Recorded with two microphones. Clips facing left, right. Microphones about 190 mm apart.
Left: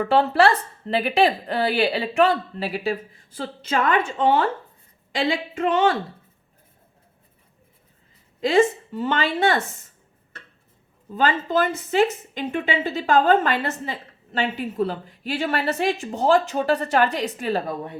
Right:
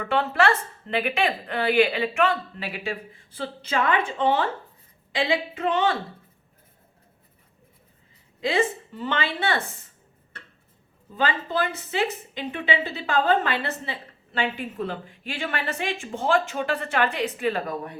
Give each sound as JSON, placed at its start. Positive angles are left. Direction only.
{"t": 0.0, "sound": "a woman's voice", "side_deg": 35}
{"t": 8.4, "sound": "a woman's voice", "side_deg": 45}
{"t": 11.1, "sound": "a woman's voice", "side_deg": 45}